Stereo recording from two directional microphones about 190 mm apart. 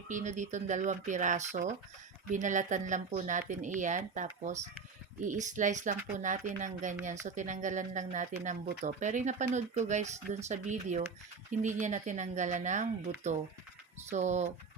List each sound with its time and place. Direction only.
0.1 s speech: 40° right (ahead or behind)
14.1 s speech: 40° right (ahead or behind)